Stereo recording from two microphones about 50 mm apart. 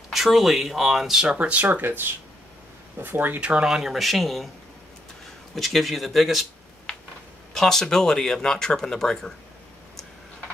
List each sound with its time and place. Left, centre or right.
0.1 s speech: centre
1.2 s speech: right
1.8 s speech: right
3.3 s speech: right
3.6 s speech: centre
5.5 s speech: centre
7.5 s speech: centre